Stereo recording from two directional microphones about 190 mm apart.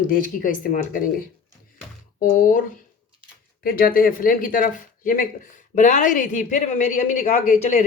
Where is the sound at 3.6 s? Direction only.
50° left (ahead or behind).